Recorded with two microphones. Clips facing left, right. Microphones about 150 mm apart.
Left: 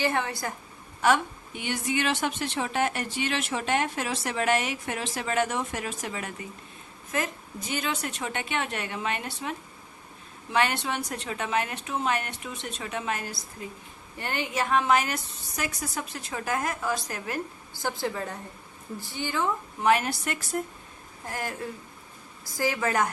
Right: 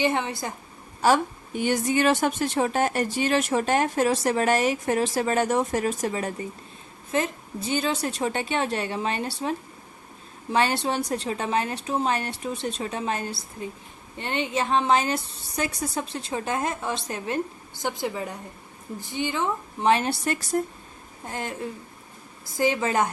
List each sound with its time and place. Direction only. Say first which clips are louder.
0.0 s a woman's voice: right 3 dB; 20° right (ahead or behind)
1.0 s a woman's voice: right 3 dB; 40° right (ahead or behind); by 23.1 s 20° right (ahead or behind)